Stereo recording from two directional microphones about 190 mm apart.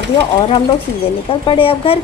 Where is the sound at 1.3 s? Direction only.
30° left (ahead or behind).